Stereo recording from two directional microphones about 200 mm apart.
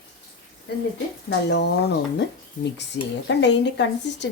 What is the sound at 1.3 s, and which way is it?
Speech, 60° left (ahead or behind).